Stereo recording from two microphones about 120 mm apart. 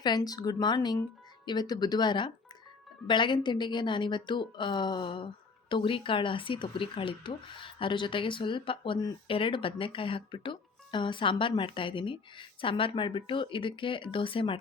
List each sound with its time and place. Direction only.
0.0 s speech: 35° left (ahead or behind)